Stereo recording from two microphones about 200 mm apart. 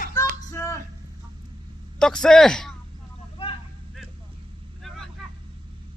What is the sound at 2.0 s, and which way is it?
Speech, 5° left (ahead or behind).